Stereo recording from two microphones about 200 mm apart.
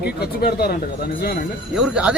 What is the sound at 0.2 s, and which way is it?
Speech, 50° left (ahead or behind).